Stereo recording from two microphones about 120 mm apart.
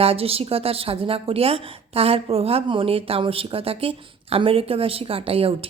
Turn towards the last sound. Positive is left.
turn(degrees=-50)  # may be behind; listen again after turning